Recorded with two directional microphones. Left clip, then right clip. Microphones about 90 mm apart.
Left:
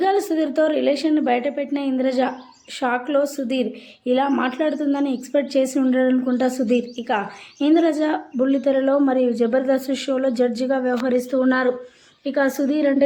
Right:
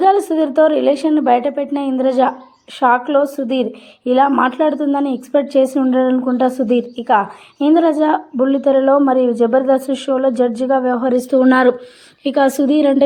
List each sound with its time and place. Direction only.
0.0 s a woman's voice: 20° right (ahead or behind)
11.2 s a woman's voice: 75° right (ahead or behind)
12.3 s a woman's voice: 90° right